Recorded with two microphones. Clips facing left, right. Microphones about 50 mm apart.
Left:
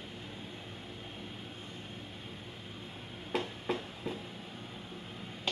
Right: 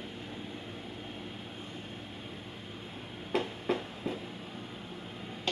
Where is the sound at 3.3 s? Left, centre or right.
Centre.